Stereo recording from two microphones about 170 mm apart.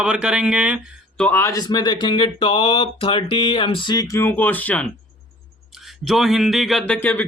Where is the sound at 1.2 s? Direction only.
10° left (ahead or behind).